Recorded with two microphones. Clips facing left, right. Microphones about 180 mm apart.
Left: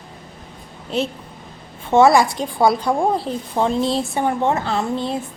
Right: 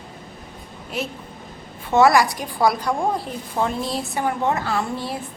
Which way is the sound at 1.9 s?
25° left (ahead or behind).